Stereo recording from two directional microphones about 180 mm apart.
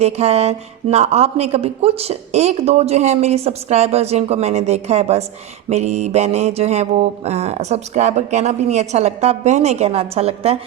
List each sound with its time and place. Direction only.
0.0 s speech: 35° right (ahead or behind)